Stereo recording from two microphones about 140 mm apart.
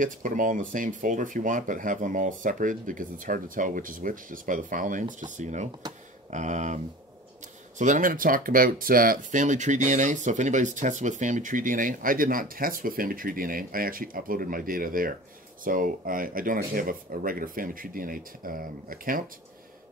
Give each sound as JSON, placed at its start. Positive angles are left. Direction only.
{"t": 0.0, "sound": "speech", "side_deg": -70}
{"t": 7.8, "sound": "speech", "side_deg": -70}
{"t": 15.6, "sound": "speech", "side_deg": -75}